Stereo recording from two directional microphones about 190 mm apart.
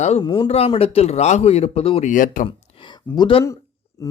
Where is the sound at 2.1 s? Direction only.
45° left (ahead or behind).